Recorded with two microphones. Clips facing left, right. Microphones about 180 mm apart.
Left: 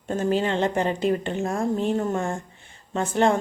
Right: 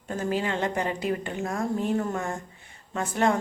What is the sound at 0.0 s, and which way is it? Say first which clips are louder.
Speech: left 5 dB; 30° left (ahead or behind).